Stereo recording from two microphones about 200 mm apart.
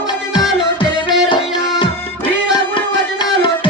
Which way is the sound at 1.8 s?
25° left (ahead or behind).